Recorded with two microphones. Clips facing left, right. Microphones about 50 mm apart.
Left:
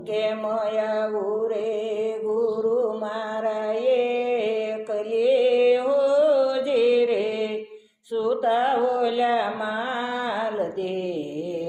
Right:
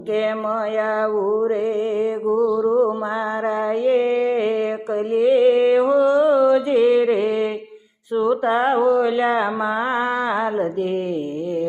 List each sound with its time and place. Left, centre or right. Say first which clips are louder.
0.1 s mantra: right 4 dB; right
2.0 s music: right 5 dB; right
3.4 s mantra: right 2 dB; right